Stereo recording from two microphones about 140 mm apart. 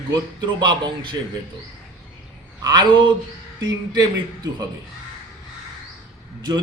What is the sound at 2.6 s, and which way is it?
Speech, 30° right (ahead or behind).